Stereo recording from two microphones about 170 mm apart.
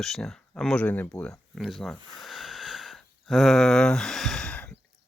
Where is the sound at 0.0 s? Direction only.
Centre (ahead or behind).